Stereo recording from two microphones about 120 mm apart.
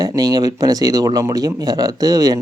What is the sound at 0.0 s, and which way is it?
Speech, 35° right (ahead or behind).